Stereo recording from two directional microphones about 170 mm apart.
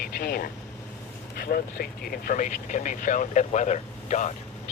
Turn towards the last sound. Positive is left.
turn(degrees=45)  # may be behind; listen again after turning